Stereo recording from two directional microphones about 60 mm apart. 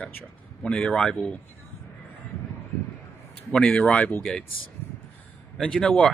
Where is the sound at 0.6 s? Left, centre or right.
Centre.